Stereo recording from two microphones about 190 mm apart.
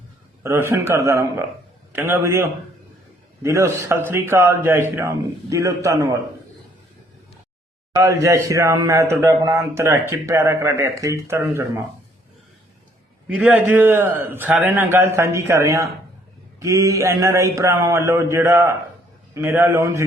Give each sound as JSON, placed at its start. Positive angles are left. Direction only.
{"t": 0.4, "sound": "a man's voice", "side_deg": -15}
{"t": 7.9, "sound": "a man's voice", "side_deg": -15}
{"t": 13.2, "sound": "a man's voice", "side_deg": -10}